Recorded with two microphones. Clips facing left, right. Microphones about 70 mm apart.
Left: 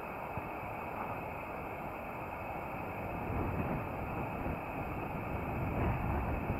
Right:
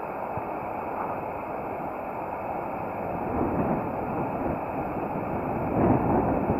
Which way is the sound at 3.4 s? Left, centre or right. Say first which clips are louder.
Right 13 dB; right.